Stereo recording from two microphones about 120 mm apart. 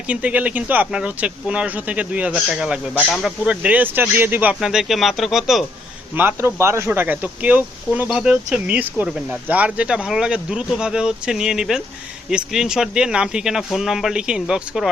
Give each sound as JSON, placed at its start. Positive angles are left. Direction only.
{"t": 0.1, "sound": "speech", "side_deg": -10}
{"t": 4.6, "sound": "speech", "side_deg": -5}
{"t": 6.1, "sound": "speech", "side_deg": -20}